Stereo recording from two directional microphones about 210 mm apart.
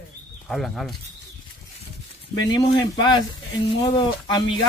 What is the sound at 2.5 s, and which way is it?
Speech, 20° left (ahead or behind).